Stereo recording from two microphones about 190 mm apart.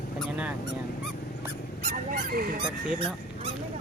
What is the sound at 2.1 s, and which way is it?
Speech, 50° right (ahead or behind).